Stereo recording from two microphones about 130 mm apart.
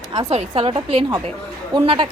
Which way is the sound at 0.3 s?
45° right (ahead or behind).